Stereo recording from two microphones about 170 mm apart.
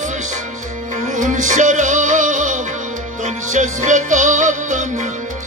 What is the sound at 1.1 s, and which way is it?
Music, 50° right (ahead or behind).